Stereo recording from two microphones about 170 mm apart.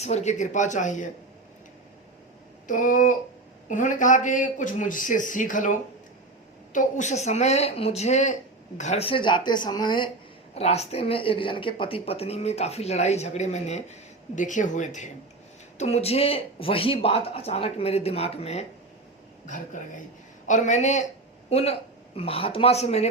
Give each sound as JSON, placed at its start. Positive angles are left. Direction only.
{"t": 0.0, "sound": "speech", "side_deg": 40}
{"t": 2.6, "sound": "speech", "side_deg": 50}
{"t": 6.7, "sound": "speech", "side_deg": 45}
{"t": 10.5, "sound": "speech", "side_deg": 40}
{"t": 19.5, "sound": "speech", "side_deg": 45}